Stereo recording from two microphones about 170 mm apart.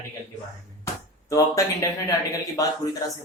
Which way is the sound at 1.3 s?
20° left (ahead or behind).